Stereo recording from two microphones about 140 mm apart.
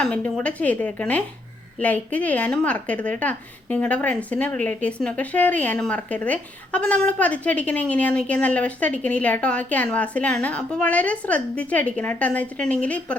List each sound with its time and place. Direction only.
0.0 s a woman's voice: 5° left (ahead or behind)